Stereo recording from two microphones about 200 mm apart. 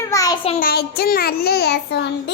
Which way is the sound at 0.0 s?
15° left (ahead or behind).